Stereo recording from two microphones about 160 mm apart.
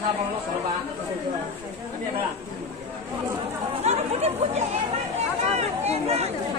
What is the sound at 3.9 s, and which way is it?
Chatter, 40° right (ahead or behind).